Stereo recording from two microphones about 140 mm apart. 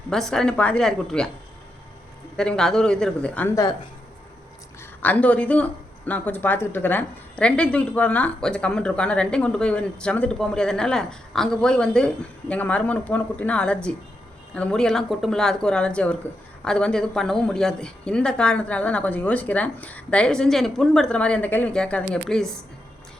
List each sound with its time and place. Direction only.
0.1 s speech: 5° left (ahead or behind)
2.3 s speech: 5° left (ahead or behind)
3.5 s speech: 25° left (ahead or behind)
4.8 s a woman's voice: 10° left (ahead or behind)